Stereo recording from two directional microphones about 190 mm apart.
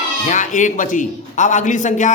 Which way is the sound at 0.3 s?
40° left (ahead or behind).